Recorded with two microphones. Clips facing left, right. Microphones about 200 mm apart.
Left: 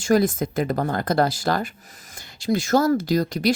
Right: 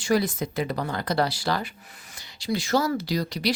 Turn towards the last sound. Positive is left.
turn(degrees=50)  # may be behind; listen again after turning